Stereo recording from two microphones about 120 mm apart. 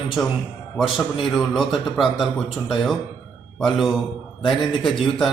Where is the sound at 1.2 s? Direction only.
Centre (ahead or behind).